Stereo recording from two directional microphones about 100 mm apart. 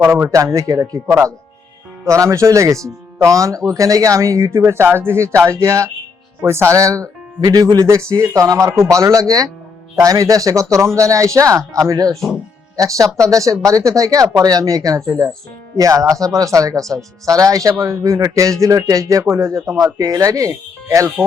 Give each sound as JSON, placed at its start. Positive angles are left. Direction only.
{"t": 0.1, "sound": "speech", "side_deg": -30}